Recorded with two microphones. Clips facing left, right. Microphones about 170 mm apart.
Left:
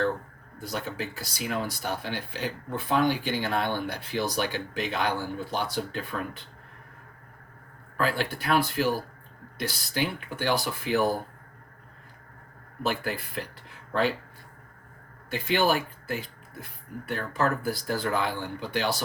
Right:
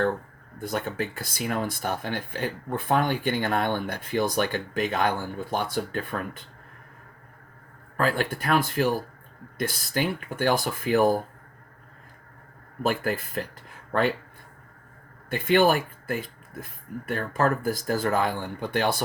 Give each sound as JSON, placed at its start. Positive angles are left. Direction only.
{"t": 0.6, "sound": "speech", "side_deg": -55}
{"t": 7.9, "sound": "speech", "side_deg": -45}
{"t": 12.8, "sound": "speech", "side_deg": -45}
{"t": 15.3, "sound": "speech", "side_deg": -50}